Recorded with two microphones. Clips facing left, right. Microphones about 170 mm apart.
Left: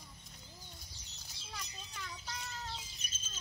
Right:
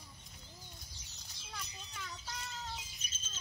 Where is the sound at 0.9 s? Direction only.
15° right (ahead or behind).